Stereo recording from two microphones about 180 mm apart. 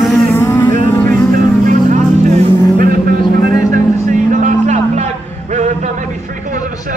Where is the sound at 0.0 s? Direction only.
Centre (ahead or behind).